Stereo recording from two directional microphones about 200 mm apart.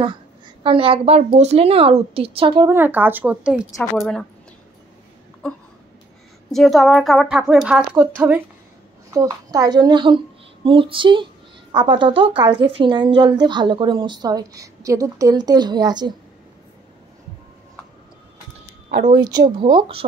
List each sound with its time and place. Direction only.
0.7 s a woman's voice: 25° right (ahead or behind)
2.7 s a woman's voice: 10° right (ahead or behind)
5.4 s a woman's voice: 5° left (ahead or behind); by 16.2 s 20° right (ahead or behind)
19.0 s a woman's voice: 20° right (ahead or behind)